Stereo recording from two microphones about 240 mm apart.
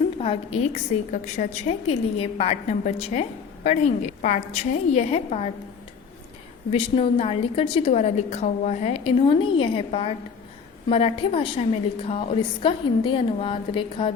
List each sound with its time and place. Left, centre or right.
0.2 s a woman's voice: left
6.7 s a woman's voice: left